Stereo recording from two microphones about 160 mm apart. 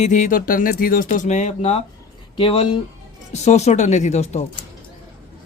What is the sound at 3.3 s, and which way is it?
Speech, 45° left (ahead or behind).